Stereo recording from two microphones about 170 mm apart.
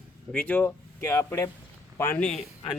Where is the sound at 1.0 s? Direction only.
20° left (ahead or behind).